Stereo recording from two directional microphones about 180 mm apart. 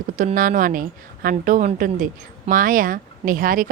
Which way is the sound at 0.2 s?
45° right (ahead or behind).